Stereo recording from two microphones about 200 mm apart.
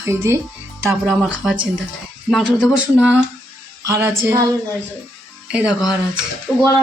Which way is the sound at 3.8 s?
15° right (ahead or behind).